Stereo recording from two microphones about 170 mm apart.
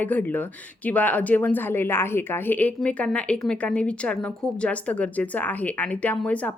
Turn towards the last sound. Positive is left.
turn(degrees=10)  # may be behind; listen again after turning